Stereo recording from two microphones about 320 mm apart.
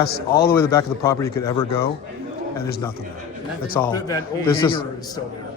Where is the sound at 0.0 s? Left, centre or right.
Left.